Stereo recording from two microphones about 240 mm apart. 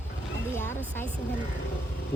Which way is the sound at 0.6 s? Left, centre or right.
Centre.